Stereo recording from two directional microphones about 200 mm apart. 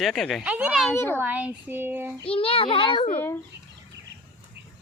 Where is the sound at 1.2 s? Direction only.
10° right (ahead or behind).